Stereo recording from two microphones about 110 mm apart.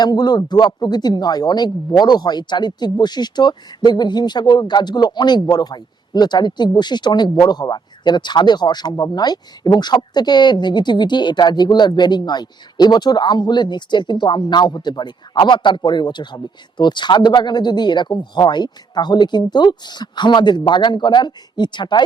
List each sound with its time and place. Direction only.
0.0 s a man's voice: 40° left (ahead or behind)